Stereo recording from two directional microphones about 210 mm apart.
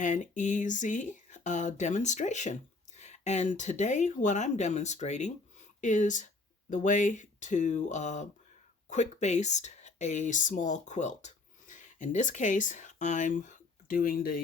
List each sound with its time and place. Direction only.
0.0 s speech: 35° left (ahead or behind)